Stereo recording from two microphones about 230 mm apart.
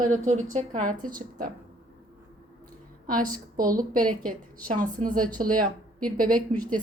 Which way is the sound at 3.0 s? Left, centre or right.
Right.